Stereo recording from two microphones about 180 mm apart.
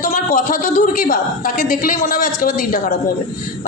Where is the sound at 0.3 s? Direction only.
50° left (ahead or behind).